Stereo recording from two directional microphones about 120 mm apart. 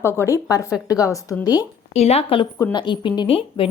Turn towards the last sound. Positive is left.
turn(degrees=50)  # may be behind; listen again after turning